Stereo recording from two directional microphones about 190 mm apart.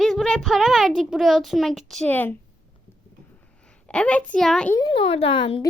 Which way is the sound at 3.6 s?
5° left (ahead or behind).